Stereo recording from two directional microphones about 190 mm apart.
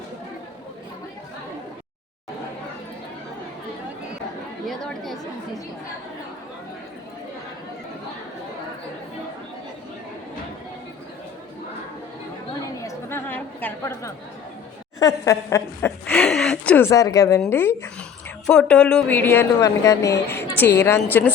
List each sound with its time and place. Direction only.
4.6 s speech: centre (ahead or behind)
12.7 s a sound: 15° left (ahead or behind)
14.9 s a woman's voice: 15° left (ahead or behind)